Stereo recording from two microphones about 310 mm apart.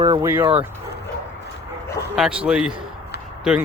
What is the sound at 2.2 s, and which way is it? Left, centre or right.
Speech, centre.